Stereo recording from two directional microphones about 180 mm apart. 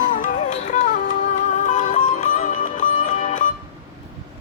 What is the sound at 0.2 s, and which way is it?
Music, 40° left (ahead or behind).